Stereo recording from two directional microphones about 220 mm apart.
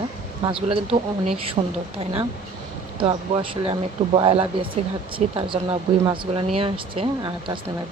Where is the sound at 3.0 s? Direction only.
25° right (ahead or behind).